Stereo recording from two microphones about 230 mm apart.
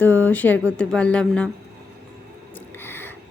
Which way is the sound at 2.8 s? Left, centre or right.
Centre.